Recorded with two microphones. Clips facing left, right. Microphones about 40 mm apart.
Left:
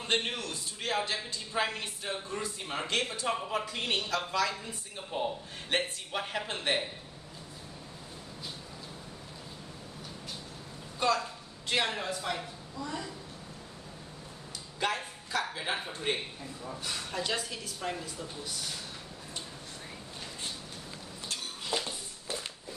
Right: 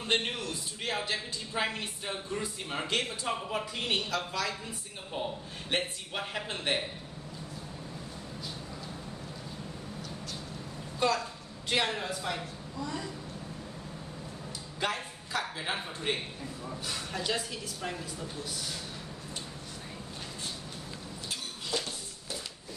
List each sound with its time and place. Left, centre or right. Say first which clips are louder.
0.0 s a man's voice: right 1 dB; centre
11.0 s a woman's voice: even; centre
14.8 s a man's voice: left 1 dB; centre
21.6 s a sound: left 1 dB; centre